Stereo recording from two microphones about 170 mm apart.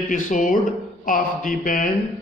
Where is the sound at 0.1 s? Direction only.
50° left (ahead or behind).